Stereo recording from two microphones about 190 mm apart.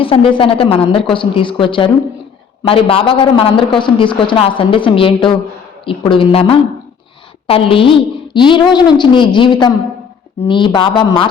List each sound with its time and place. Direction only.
0.0 s a man's voice: 30° left (ahead or behind)